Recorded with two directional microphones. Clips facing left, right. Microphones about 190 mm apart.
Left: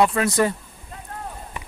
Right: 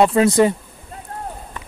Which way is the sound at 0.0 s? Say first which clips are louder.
Right 5 dB; 25° right (ahead or behind).